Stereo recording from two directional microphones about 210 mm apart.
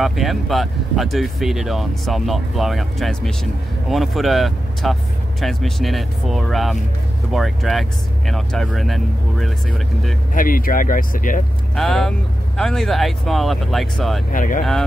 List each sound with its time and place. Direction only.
0.0 s speech: centre (ahead or behind)
10.3 s speech: 40° left (ahead or behind)
11.7 s speech: centre (ahead or behind)
14.3 s speech: 40° left (ahead or behind)